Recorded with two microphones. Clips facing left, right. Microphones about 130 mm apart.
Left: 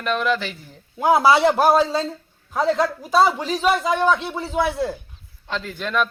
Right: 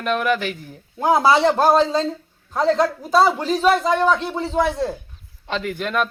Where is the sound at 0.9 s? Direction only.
10° left (ahead or behind).